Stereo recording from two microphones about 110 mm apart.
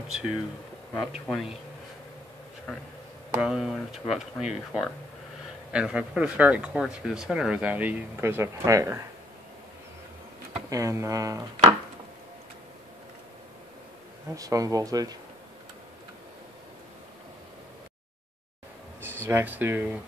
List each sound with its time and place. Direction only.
0.1 s speech: 5° right (ahead or behind)
3.3 s speech: 5° right (ahead or behind); by 9.0 s 30° right (ahead or behind)
10.7 s speech: 30° right (ahead or behind)
14.3 s speech: 30° right (ahead or behind)
18.9 s speech: 20° right (ahead or behind)